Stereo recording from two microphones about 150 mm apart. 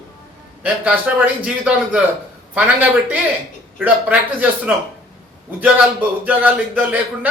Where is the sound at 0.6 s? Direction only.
10° right (ahead or behind).